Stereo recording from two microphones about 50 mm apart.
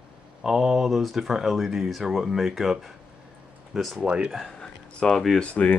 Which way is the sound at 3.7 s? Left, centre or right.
Centre.